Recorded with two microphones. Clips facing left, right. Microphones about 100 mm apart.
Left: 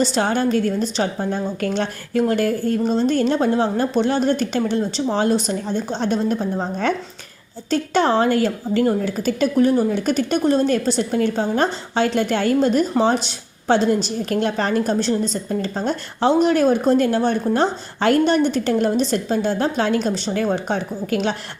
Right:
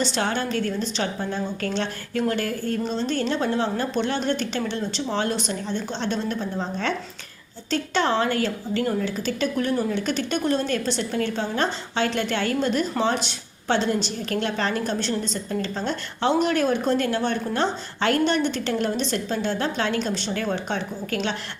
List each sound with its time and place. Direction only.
0.0 s a woman's voice: 40° left (ahead or behind)
9.6 s a woman's voice: 35° left (ahead or behind)